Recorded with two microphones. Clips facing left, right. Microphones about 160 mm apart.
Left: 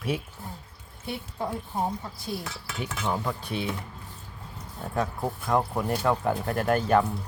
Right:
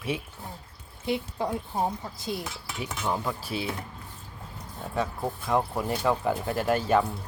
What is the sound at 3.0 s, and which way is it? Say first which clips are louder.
Speech: even; 5° right (ahead or behind).